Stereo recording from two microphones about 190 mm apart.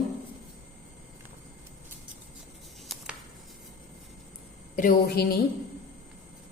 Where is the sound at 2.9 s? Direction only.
Centre (ahead or behind).